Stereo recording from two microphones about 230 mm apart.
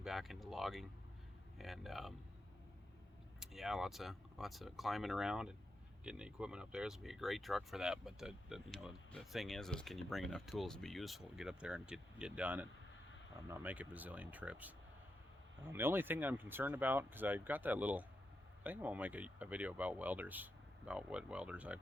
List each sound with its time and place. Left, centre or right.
0.0 s speech: centre
3.4 s speech: centre